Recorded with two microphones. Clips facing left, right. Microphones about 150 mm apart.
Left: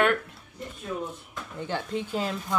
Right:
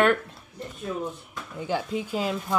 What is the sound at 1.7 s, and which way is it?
Speech, 10° right (ahead or behind).